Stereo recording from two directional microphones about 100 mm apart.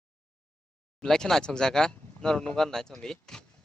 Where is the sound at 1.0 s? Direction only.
5° left (ahead or behind).